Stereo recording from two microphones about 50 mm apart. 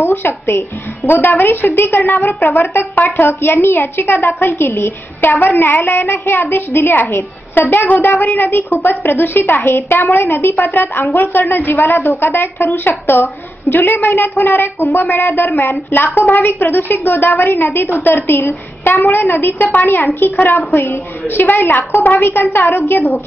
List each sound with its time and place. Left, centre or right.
0.0 s a woman's voice: left